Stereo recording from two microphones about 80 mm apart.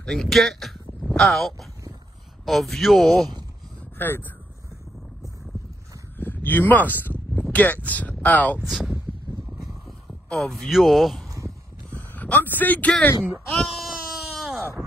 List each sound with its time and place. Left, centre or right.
0.0 s speech: centre
4.0 s speech: left
6.1 s a sound: left
7.5 s speech: left
8.6 s speech: centre
9.5 s a sound: centre
10.7 s speech: centre
11.9 s a sound: left
13.5 s sheep: centre